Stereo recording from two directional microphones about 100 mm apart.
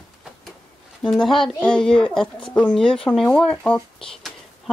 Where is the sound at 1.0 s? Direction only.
5° left (ahead or behind).